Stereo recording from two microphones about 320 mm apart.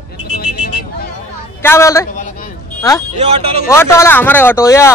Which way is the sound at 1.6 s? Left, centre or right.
Centre.